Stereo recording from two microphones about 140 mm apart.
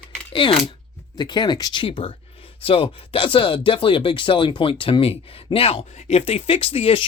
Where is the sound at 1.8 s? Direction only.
40° left (ahead or behind).